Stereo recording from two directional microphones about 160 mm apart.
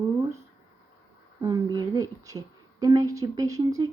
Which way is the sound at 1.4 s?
25° right (ahead or behind).